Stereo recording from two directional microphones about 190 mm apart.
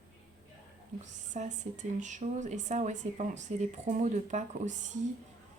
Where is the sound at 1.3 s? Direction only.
40° right (ahead or behind).